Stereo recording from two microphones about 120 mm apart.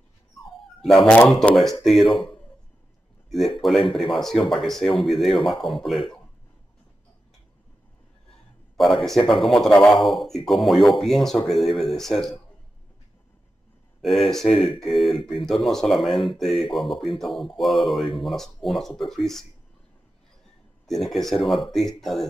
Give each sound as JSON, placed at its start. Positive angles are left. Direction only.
{"t": 0.8, "sound": "speech", "side_deg": 5}
{"t": 3.3, "sound": "speech", "side_deg": 0}
{"t": 8.7, "sound": "speech", "side_deg": 0}
{"t": 14.0, "sound": "speech", "side_deg": 0}
{"t": 20.8, "sound": "speech", "side_deg": 0}